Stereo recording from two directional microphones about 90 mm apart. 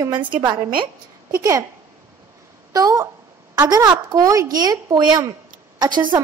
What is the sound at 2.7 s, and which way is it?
A woman's voice, 40° right (ahead or behind).